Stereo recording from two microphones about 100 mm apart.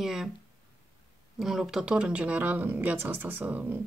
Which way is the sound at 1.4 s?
5° right (ahead or behind).